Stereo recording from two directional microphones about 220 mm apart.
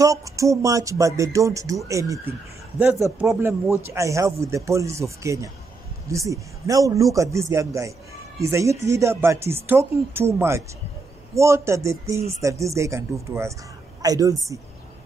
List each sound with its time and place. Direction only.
0.0 s a man's voice: 15° right (ahead or behind)